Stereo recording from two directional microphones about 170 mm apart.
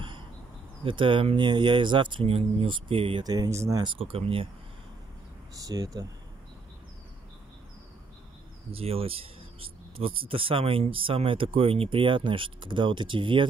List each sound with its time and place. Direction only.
0.8 s speech: 30° right (ahead or behind)
5.6 s speech: 20° right (ahead or behind)
8.7 s speech: 35° right (ahead or behind)